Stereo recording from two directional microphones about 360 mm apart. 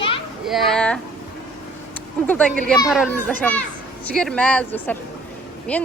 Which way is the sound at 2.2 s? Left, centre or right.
Centre.